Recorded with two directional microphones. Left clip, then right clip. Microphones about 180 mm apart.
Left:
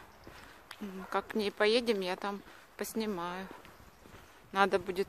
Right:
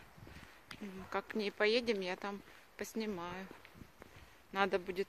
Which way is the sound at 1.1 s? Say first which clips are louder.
Left 5 dB; 10° left (ahead or behind).